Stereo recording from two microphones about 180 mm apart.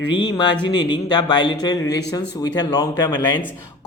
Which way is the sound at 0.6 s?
25° left (ahead or behind).